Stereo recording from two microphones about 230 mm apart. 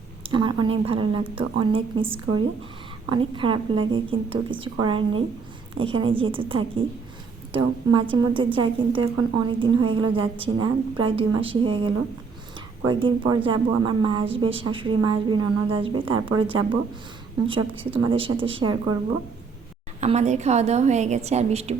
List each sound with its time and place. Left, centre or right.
0.2 s a woman's voice: right
3.1 s a woman's voice: right
20.0 s a woman's voice: right